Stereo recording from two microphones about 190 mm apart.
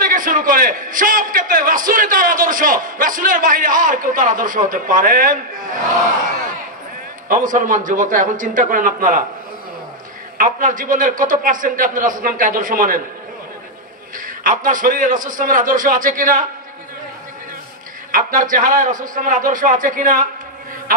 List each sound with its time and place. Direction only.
0.0 s a man's voice: 45° right (ahead or behind)
7.2 s a man's voice: 45° right (ahead or behind)
10.3 s a man's voice: 45° right (ahead or behind)
14.1 s a man's voice: 45° right (ahead or behind)
18.1 s a man's voice: 45° right (ahead or behind)